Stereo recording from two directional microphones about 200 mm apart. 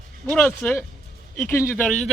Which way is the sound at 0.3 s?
10° left (ahead or behind).